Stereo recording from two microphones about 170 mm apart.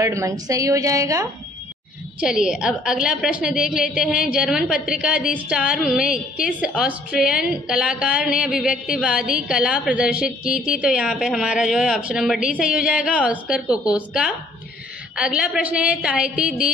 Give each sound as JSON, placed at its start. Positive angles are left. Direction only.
{"t": 0.0, "sound": "a woman's voice", "side_deg": -20}
{"t": 2.1, "sound": "a woman's voice", "side_deg": -5}